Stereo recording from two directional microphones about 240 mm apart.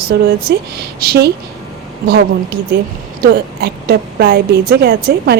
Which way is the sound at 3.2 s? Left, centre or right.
Right.